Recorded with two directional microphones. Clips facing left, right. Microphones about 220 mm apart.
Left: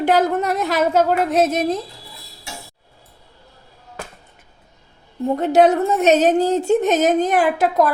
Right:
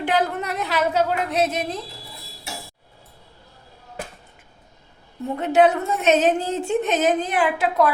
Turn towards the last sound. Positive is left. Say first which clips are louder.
# left 3 dB
turn(degrees=45)  # may be behind; listen again after turning